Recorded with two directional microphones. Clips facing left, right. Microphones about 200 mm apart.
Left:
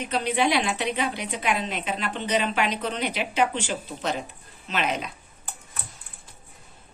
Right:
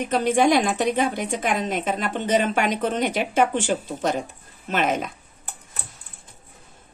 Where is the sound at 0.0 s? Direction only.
45° right (ahead or behind).